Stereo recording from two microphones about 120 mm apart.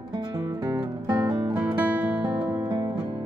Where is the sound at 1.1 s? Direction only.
40° right (ahead or behind).